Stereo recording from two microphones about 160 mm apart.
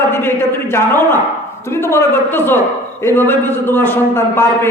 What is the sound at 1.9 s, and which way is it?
A man's voice, 15° left (ahead or behind).